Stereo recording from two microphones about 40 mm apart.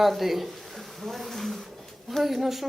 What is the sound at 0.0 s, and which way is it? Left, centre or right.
Speech, centre.